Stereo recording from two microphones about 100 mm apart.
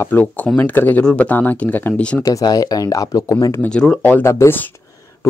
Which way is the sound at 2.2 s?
40° left (ahead or behind).